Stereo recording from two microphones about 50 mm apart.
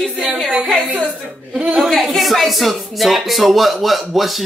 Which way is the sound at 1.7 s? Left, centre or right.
Centre.